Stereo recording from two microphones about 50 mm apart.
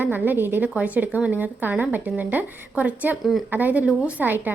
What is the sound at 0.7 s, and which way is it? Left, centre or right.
A woman's voice, right.